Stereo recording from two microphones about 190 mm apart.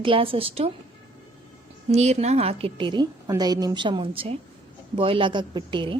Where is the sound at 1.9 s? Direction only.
35° right (ahead or behind).